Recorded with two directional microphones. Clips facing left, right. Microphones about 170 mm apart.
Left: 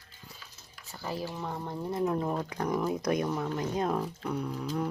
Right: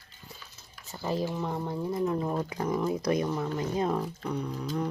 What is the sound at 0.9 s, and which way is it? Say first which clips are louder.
Speech: right 5 dB; 25° right (ahead or behind).